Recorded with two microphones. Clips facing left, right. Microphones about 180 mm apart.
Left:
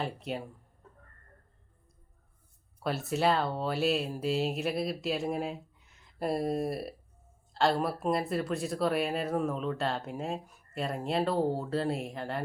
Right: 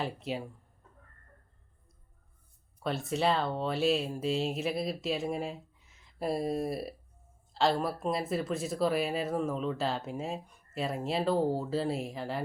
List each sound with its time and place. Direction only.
0.0 s speech: centre (ahead or behind)
2.8 s speech: centre (ahead or behind)